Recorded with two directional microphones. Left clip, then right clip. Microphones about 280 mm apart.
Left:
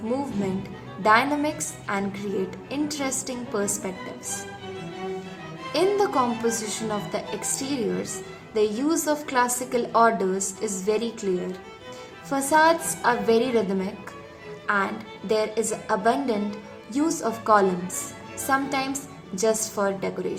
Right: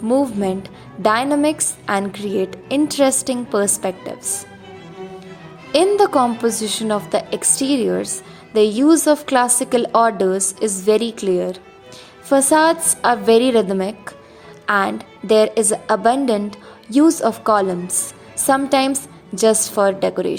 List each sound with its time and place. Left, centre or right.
1.0 s a woman's voice: right
5.7 s a woman's voice: right